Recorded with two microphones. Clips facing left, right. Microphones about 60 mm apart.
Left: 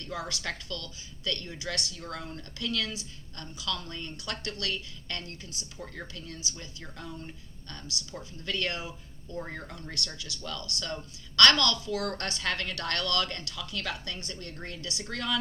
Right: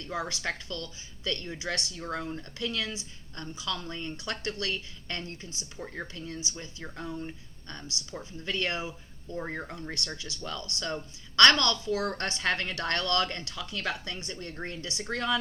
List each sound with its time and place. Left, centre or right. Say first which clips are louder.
0.0 s a woman's voice: right 2 dB; right